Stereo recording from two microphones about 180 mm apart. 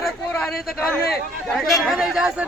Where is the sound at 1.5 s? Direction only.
Centre (ahead or behind).